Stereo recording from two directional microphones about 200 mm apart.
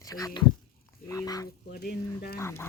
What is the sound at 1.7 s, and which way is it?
Speech, 50° left (ahead or behind).